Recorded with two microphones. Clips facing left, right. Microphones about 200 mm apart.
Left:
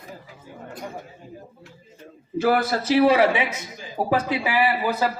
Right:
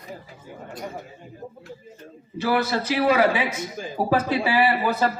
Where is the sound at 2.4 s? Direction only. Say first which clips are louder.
Left 2 dB; 50° left (ahead or behind).